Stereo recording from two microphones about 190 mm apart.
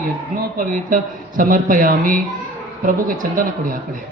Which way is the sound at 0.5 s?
45° right (ahead or behind).